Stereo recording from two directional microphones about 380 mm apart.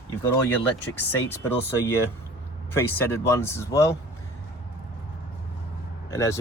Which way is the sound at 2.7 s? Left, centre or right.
Centre.